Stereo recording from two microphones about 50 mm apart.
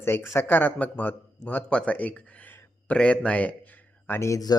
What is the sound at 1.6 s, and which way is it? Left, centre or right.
Speech, left.